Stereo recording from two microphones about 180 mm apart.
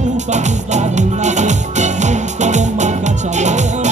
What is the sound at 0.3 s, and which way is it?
Music, 40° right (ahead or behind).